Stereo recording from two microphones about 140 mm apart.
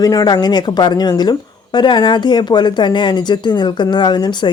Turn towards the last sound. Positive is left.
turn(degrees=30)  # may be behind; listen again after turning